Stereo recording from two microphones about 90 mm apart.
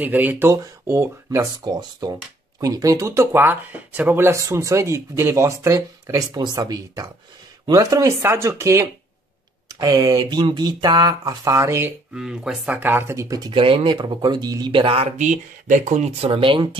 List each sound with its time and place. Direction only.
0.0 s speech: 20° right (ahead or behind)
0.5 s speech: 30° right (ahead or behind)
1.4 s speech: 50° right (ahead or behind); by 6.2 s 30° right (ahead or behind)
6.3 s speech: 50° right (ahead or behind)
10.4 s speech: 55° right (ahead or behind); by 11.9 s 30° right (ahead or behind)
12.1 s speech: 5° right (ahead or behind)
12.8 s speech: 25° right (ahead or behind)
13.5 s speech: 85° right; by 15.0 s 70° right (ahead or behind)
16.2 s speech: 75° right (ahead or behind)